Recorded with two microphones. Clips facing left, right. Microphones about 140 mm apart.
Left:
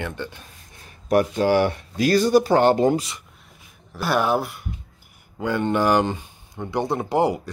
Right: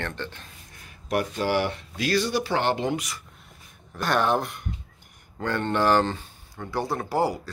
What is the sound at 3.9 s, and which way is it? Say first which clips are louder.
Speech: left 2 dB; 10° left (ahead or behind).